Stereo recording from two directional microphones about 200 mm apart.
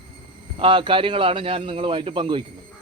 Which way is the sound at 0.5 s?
25° right (ahead or behind).